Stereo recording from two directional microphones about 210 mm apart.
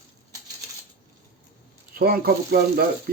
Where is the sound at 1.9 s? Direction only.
45° right (ahead or behind).